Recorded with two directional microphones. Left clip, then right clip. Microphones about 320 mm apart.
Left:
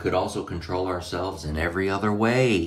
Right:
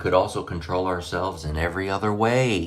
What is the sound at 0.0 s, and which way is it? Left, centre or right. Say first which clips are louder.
Speech: right 4 dB; centre.